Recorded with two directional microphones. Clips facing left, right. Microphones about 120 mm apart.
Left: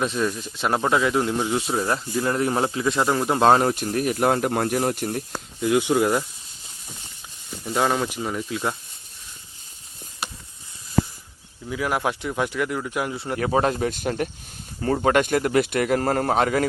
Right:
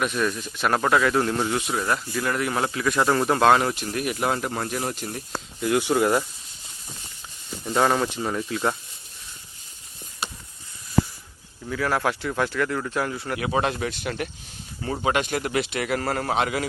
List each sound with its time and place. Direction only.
0.0 s speech: 25° left (ahead or behind)
3.4 s a man's voice: 35° left (ahead or behind)
5.6 s speech: 15° left (ahead or behind)
5.9 s speech: 10° right (ahead or behind)
7.6 s speech: 5° left (ahead or behind)
11.7 s speech: 15° left (ahead or behind)
13.1 s speech: 25° left (ahead or behind)
13.4 s a man's voice: 40° left (ahead or behind)